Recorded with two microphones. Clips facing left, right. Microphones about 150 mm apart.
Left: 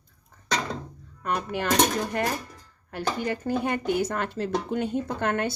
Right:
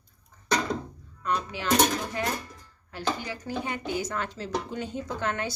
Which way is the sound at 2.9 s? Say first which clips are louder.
Left 3 dB; 55° left (ahead or behind).